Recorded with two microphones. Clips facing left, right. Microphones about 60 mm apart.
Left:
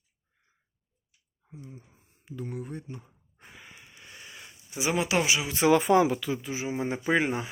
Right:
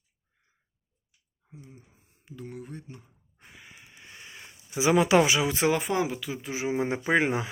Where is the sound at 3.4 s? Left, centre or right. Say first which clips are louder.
Left 1 dB; centre.